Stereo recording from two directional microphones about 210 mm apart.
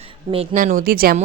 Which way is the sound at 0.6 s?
40° right (ahead or behind).